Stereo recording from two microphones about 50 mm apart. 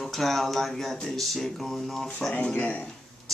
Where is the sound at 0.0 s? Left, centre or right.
Centre.